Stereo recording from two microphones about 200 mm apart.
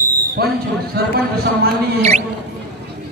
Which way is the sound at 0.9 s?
50° right (ahead or behind).